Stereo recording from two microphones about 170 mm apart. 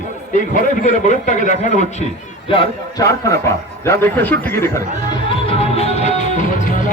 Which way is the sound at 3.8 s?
10° left (ahead or behind).